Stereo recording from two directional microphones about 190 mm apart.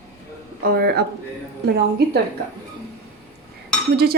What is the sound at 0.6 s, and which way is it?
A woman's voice, 55° right (ahead or behind).